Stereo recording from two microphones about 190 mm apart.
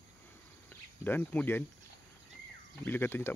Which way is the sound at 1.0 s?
10° left (ahead or behind).